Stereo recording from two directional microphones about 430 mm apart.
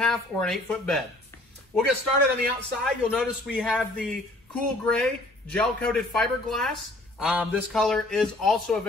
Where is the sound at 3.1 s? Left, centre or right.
Centre.